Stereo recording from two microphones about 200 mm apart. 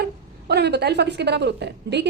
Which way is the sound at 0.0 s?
55° right (ahead or behind).